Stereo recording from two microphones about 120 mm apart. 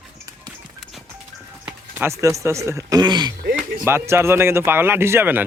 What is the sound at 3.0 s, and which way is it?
Speech, 35° right (ahead or behind).